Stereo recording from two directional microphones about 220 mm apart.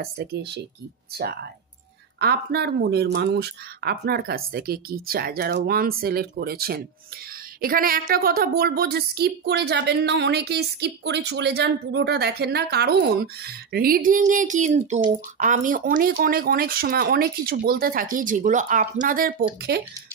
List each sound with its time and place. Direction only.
0.0 s a woman's voice: 45° right (ahead or behind)